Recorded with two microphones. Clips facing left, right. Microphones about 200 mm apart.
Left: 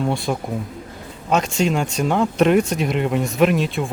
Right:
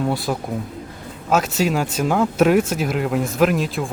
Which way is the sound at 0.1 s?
5° right (ahead or behind).